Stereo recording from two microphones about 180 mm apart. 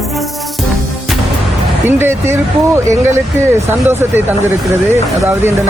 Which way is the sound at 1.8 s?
15° right (ahead or behind).